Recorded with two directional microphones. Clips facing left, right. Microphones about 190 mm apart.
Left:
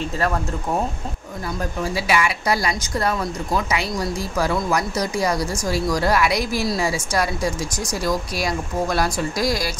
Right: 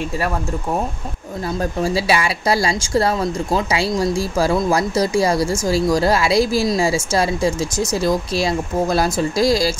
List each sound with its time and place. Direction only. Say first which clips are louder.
1.6 s speech: right 5 dB; 30° right (ahead or behind)